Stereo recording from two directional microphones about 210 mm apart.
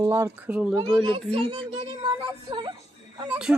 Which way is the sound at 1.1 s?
25° right (ahead or behind).